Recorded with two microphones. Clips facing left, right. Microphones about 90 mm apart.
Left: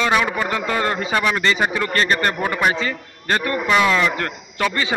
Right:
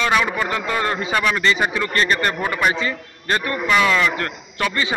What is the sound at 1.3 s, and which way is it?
A man's voice, 35° left (ahead or behind).